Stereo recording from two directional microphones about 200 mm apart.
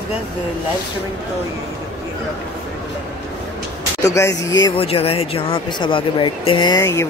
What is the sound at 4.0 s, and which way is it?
Speech, 15° left (ahead or behind).